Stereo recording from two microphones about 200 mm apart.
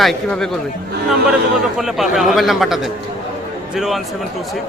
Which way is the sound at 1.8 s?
Centre (ahead or behind).